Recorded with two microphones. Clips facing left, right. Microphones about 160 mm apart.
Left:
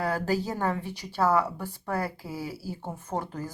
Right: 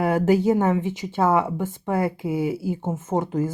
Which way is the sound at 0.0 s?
20° right (ahead or behind).